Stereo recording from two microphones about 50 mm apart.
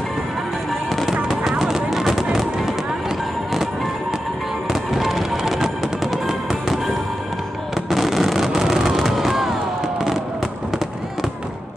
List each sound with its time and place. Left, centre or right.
1.6 s a sound: centre
4.9 s music: centre
7.7 s fireworks: centre